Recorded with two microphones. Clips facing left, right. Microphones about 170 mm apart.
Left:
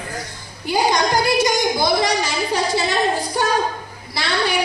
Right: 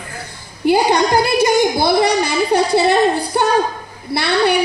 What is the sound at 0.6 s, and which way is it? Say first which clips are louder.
A woman's voice: right 5 dB; 60° right (ahead or behind).